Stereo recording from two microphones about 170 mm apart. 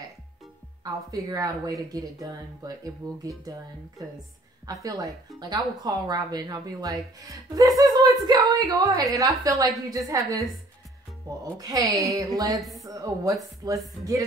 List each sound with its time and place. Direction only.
0.8 s speech: 20° right (ahead or behind)